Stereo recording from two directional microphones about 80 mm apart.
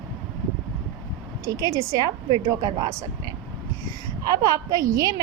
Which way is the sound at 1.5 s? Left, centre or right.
Right.